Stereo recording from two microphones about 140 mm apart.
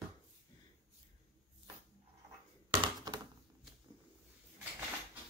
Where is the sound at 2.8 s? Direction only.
30° right (ahead or behind).